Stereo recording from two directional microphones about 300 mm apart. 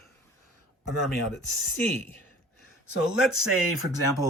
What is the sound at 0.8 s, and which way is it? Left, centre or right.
Speech, left.